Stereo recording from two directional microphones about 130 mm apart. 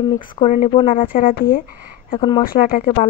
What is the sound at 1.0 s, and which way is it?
Speech, 90° left.